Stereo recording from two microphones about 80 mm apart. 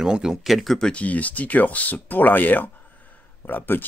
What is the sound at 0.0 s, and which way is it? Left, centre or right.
Speech, centre.